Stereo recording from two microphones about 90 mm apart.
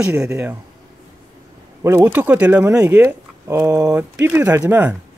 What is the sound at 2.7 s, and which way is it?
Speech, 30° right (ahead or behind).